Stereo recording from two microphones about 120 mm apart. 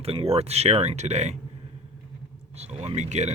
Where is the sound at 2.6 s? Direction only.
65° right (ahead or behind).